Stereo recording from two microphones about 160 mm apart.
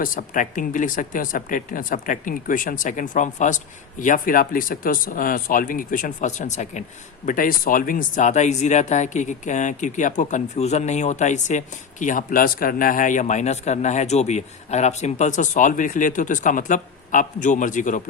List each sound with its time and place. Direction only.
0.0 s speech: 55° left (ahead or behind)
7.3 s speech: 60° left (ahead or behind)